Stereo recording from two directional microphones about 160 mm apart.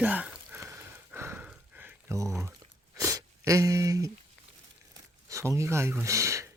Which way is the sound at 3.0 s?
20° right (ahead or behind).